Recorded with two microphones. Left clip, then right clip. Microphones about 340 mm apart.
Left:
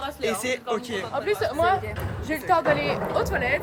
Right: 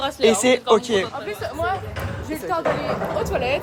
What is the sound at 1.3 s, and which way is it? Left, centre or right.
Speech, left.